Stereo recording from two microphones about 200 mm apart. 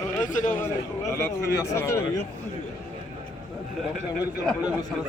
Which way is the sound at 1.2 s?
10° left (ahead or behind).